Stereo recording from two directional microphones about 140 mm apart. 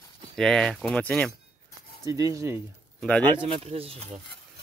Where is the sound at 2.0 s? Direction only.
25° right (ahead or behind).